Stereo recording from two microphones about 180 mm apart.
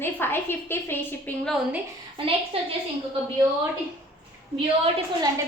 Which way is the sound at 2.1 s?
30° right (ahead or behind).